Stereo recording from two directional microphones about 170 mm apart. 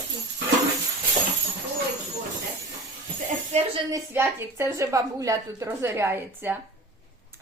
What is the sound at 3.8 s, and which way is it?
A woman's voice, 15° right (ahead or behind).